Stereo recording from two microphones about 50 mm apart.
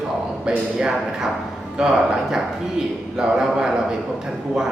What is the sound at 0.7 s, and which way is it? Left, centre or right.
Speech, centre.